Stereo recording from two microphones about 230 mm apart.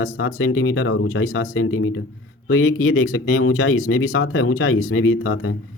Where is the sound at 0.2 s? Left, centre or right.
Left.